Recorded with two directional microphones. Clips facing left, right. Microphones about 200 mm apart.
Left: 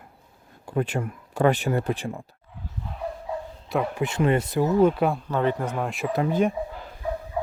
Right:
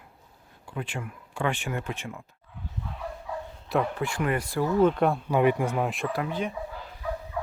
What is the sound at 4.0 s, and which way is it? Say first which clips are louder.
Speech: left 5 dB; 25° left (ahead or behind).